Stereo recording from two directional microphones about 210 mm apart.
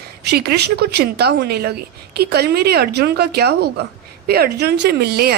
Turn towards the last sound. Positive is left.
turn(degrees=-50)  # may be behind; listen again after turning